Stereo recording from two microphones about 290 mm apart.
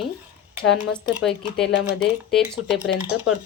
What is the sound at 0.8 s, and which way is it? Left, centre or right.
Speech, centre.